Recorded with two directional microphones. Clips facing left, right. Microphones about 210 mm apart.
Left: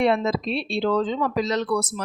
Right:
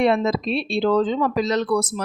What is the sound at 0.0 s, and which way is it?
Speech, 45° right (ahead or behind).